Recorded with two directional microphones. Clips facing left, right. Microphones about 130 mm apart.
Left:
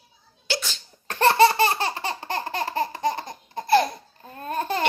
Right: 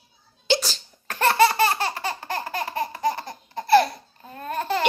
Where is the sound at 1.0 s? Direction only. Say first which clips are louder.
Left 2 dB; 25° left (ahead or behind).